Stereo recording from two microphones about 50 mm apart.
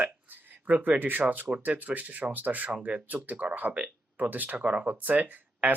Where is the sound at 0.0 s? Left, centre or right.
Right.